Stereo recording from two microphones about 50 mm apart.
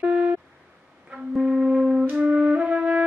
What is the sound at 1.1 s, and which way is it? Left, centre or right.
Music, centre.